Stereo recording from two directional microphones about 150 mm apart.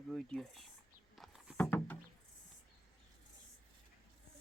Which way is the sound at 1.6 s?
10° left (ahead or behind).